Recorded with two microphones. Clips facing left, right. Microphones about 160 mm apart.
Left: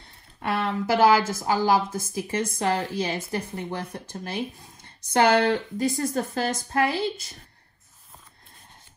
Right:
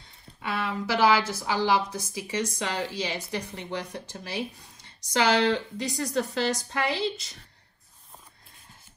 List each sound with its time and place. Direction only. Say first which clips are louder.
0.4 s a woman's voice: left 4 dB; 55° left (ahead or behind)